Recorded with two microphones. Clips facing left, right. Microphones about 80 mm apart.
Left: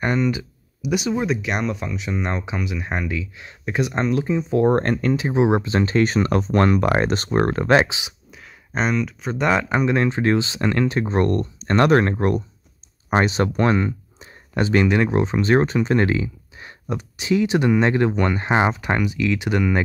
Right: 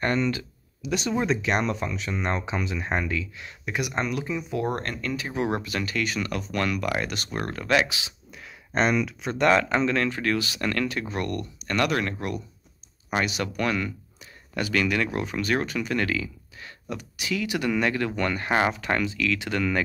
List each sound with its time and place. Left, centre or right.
0.0 s speech: centre; by 4.9 s left
5.0 s speech: left
8.3 s speech: centre; by 19.8 s left